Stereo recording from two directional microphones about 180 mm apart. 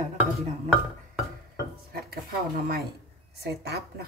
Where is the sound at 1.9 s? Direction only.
60° right (ahead or behind).